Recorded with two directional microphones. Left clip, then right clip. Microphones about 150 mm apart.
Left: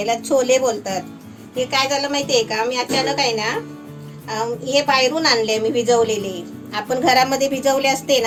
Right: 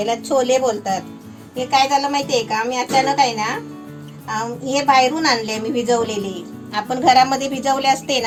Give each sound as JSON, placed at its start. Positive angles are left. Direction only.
{"t": 0.0, "sound": "a woman's voice", "side_deg": -20}